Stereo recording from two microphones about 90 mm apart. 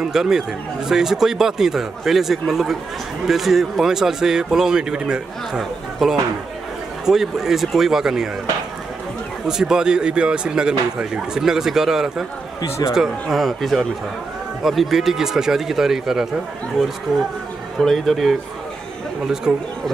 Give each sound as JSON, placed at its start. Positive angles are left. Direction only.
{"t": 0.0, "sound": "speech", "side_deg": -5}
{"t": 9.5, "sound": "speech", "side_deg": -5}
{"t": 12.6, "sound": "speech", "side_deg": 30}
{"t": 12.9, "sound": "speech", "side_deg": -5}
{"t": 19.5, "sound": "speech", "side_deg": 0}